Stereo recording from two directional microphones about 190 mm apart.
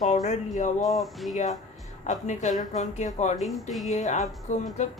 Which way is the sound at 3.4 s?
Centre (ahead or behind).